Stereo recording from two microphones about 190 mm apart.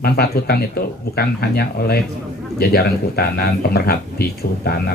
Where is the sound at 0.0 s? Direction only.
55° left (ahead or behind).